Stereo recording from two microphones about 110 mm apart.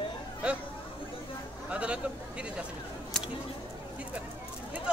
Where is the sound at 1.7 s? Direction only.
10° right (ahead or behind).